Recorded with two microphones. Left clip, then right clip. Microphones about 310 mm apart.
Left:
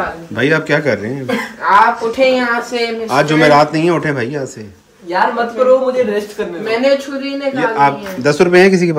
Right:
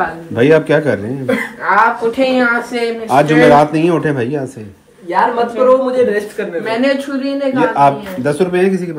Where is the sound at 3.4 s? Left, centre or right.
Centre.